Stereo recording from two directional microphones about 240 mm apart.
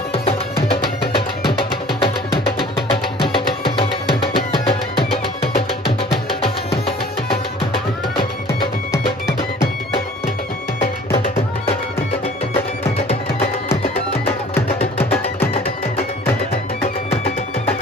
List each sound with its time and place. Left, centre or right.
0.7 s music: left
15.0 s music: centre